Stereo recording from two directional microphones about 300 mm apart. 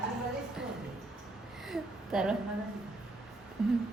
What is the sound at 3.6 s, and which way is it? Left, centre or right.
Speech, centre.